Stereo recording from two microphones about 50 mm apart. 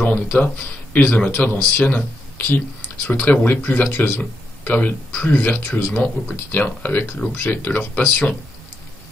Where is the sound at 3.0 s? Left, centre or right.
Left.